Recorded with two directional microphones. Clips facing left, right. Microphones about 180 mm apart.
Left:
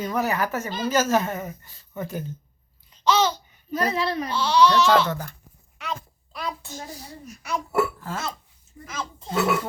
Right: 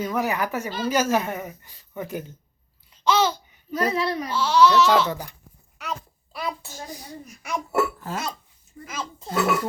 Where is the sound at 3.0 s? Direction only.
10° right (ahead or behind).